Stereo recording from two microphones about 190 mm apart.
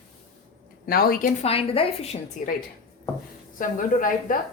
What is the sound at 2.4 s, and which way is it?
Speech, 40° left (ahead or behind).